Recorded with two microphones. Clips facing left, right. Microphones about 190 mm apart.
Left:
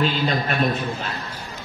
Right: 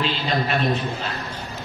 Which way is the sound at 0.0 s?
45° left (ahead or behind).